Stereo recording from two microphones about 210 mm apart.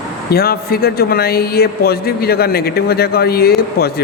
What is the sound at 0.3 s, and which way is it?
Speech, 45° left (ahead or behind).